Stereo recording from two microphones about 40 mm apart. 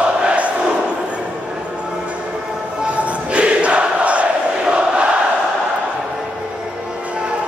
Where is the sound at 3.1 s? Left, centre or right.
Right.